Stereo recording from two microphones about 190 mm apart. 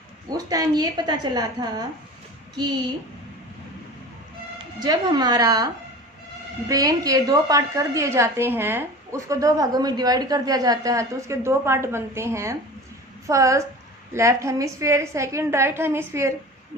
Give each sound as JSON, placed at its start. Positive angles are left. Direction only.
{"t": 0.3, "sound": "a woman's voice", "side_deg": -20}
{"t": 4.8, "sound": "a woman's voice", "side_deg": -20}